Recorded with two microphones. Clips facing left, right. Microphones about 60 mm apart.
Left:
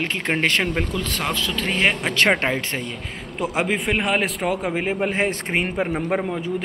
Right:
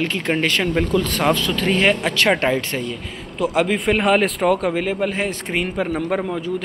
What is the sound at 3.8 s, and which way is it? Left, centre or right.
A man's voice, centre.